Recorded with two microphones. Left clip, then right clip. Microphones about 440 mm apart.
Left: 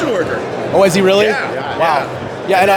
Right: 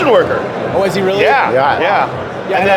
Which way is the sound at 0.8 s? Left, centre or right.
Left.